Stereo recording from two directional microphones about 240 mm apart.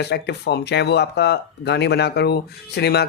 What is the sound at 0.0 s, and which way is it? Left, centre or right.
Speech, left.